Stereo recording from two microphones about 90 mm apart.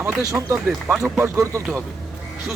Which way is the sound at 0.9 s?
5° right (ahead or behind).